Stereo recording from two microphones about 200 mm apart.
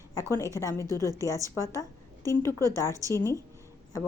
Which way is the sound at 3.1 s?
15° left (ahead or behind).